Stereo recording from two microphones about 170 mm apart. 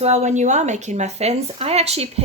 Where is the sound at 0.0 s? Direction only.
40° right (ahead or behind).